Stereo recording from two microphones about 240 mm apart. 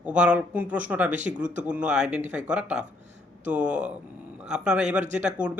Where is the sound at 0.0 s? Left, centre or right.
Centre.